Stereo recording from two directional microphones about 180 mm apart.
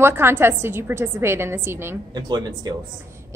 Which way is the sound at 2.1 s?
25° right (ahead or behind).